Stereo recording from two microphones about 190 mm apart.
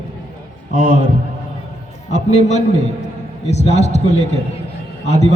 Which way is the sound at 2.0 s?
35° left (ahead or behind).